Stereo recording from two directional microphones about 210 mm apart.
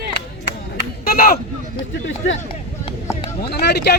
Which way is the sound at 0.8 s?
45° left (ahead or behind).